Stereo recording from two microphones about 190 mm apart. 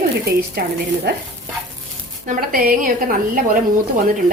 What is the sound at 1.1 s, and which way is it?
Stir, 55° right (ahead or behind).